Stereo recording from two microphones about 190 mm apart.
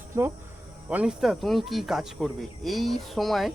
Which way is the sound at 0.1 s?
15° right (ahead or behind).